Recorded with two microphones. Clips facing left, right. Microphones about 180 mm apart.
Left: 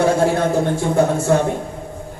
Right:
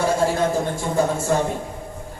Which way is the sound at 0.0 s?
65° left (ahead or behind).